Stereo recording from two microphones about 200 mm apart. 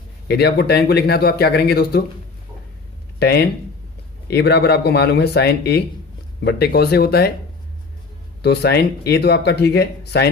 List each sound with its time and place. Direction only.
0.3 s speech: 55° left (ahead or behind)
3.2 s speech: 55° left (ahead or behind)
8.4 s speech: 55° left (ahead or behind)